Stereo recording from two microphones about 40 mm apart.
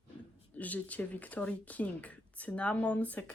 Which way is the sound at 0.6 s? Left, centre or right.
Left.